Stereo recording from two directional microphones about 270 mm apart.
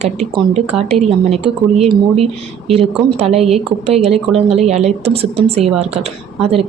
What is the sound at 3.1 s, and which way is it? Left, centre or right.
A woman's voice, right.